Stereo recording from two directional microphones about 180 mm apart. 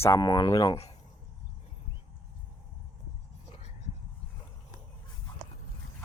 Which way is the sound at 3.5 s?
40° left (ahead or behind).